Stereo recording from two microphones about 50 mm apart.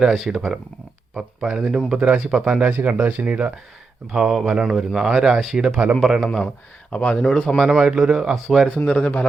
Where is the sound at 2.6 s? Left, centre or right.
Right.